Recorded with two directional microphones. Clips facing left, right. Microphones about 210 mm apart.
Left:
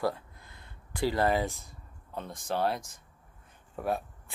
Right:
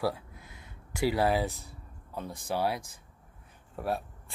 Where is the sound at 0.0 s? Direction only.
10° right (ahead or behind).